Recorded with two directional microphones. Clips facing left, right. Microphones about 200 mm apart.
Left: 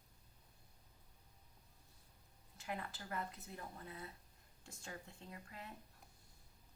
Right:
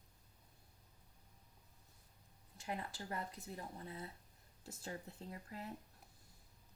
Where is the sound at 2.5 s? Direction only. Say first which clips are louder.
Right 2 dB; 25° right (ahead or behind).